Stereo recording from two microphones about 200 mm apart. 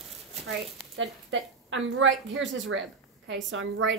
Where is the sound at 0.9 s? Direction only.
75° right (ahead or behind).